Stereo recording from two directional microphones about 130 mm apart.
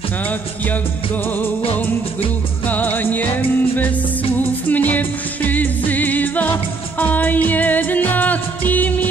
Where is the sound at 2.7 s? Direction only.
15° left (ahead or behind).